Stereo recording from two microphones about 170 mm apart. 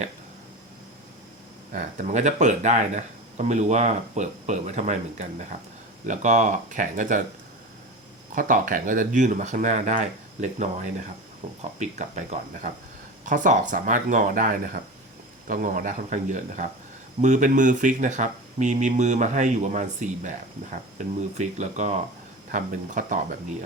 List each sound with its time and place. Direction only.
1.7 s speech: 50° right (ahead or behind)
8.4 s speech: 50° right (ahead or behind)